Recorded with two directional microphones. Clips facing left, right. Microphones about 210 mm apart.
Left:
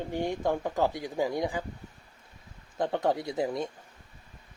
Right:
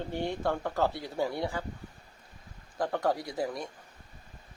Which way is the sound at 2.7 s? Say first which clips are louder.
Left 2 dB; 20° left (ahead or behind).